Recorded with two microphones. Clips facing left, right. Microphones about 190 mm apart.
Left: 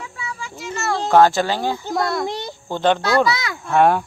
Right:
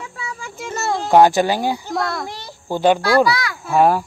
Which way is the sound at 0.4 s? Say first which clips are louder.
Right 2 dB; 50° right (ahead or behind).